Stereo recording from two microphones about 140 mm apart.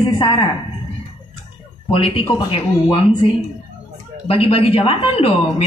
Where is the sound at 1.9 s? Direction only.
40° left (ahead or behind).